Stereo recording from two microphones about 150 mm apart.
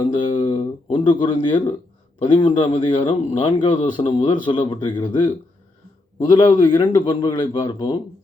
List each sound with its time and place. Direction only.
0.0 s a sound: 35° left (ahead or behind)
2.1 s a man's voice: 35° left (ahead or behind)
6.2 s a man's voice: 30° left (ahead or behind)